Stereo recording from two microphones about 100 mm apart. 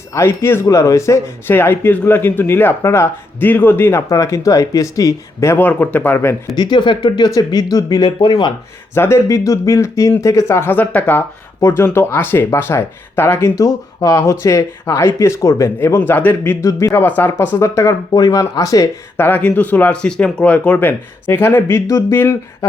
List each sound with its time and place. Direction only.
0.1 s speech: 25° left (ahead or behind)
5.5 s speech: 15° left (ahead or behind)
6.6 s speech: 50° left (ahead or behind)
7.3 s speech: 40° left (ahead or behind)
9.0 s speech: 25° left (ahead or behind)
13.6 s speech: 35° left (ahead or behind)
16.0 s speech: 20° left (ahead or behind)
16.9 s speech: 20° left (ahead or behind)
19.1 s speech: 20° left (ahead or behind)